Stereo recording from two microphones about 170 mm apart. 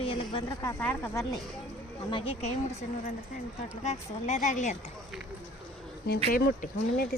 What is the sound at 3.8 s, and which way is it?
Speech, 40° left (ahead or behind).